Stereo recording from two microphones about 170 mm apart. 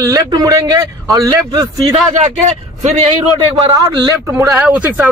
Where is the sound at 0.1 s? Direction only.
20° right (ahead or behind).